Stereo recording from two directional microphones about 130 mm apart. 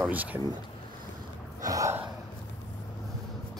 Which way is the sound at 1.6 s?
25° right (ahead or behind).